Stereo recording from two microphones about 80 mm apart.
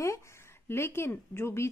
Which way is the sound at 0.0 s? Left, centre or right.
Left.